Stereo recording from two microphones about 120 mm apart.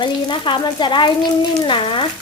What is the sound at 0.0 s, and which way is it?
Speech, 40° left (ahead or behind).